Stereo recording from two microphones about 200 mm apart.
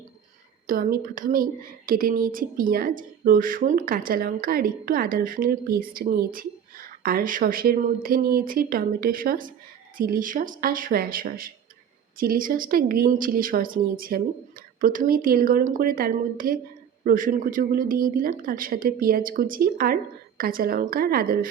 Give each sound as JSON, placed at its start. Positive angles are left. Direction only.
{"t": 0.7, "sound": "a woman's voice", "side_deg": -45}